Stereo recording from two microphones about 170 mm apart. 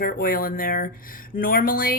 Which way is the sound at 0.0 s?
60° left (ahead or behind).